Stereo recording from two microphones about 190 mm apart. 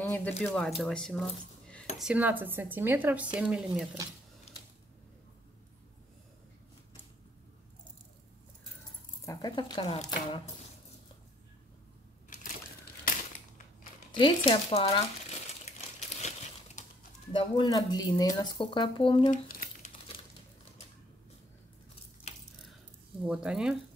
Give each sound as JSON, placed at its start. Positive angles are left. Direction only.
{"t": 0.0, "sound": "a sound", "side_deg": 10}
{"t": 0.4, "sound": "speech", "side_deg": 5}
{"t": 9.2, "sound": "speech", "side_deg": 20}
{"t": 14.1, "sound": "speech", "side_deg": 25}
{"t": 16.0, "sound": "crumpling", "side_deg": 35}
{"t": 17.3, "sound": "speech", "side_deg": 25}
{"t": 19.3, "sound": "crumpling", "side_deg": 45}
{"t": 23.2, "sound": "speech", "side_deg": -5}